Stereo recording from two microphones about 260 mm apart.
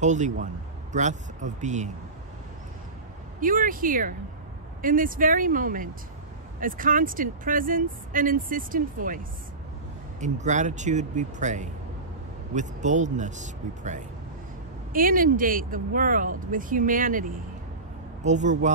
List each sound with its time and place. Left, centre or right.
0.0 s speech: right
3.3 s speech: right
10.2 s speech: right